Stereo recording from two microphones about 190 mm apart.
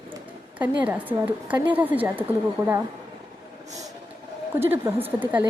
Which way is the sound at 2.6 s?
25° right (ahead or behind).